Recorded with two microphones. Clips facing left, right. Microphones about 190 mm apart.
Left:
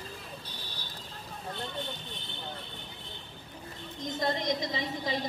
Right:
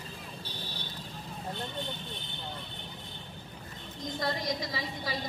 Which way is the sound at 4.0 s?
20° left (ahead or behind).